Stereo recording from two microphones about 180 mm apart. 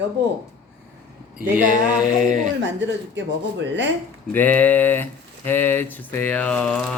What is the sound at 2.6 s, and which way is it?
A woman's voice, 85° right.